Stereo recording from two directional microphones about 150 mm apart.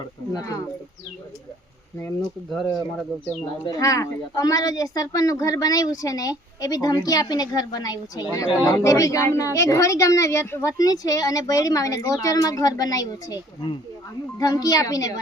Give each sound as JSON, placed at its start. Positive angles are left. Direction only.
{"t": 0.3, "sound": "a woman's voice", "side_deg": 20}
{"t": 3.4, "sound": "a woman's voice", "side_deg": 25}